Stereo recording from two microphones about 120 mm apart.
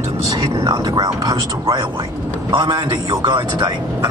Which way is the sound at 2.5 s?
40° right (ahead or behind).